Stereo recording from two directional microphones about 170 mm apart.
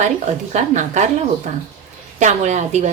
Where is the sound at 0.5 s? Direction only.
45° right (ahead or behind).